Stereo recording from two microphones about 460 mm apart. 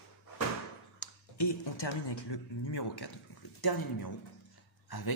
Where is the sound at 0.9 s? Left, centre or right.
Left.